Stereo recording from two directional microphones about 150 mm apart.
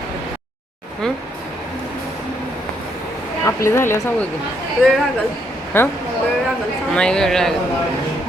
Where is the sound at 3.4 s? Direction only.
20° left (ahead or behind).